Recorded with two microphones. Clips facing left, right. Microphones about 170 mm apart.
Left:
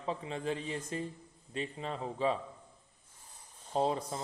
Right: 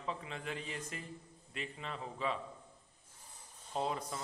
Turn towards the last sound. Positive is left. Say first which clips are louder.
# left 6 dB
turn(degrees=30)  # may be behind; listen again after turning